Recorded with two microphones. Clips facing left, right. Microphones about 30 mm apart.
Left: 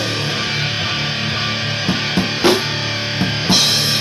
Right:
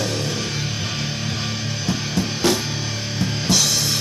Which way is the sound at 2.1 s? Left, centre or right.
Left.